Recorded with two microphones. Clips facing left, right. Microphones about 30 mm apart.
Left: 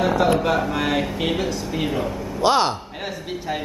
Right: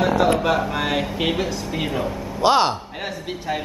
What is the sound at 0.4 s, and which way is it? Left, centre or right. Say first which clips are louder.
Speech: even; centre.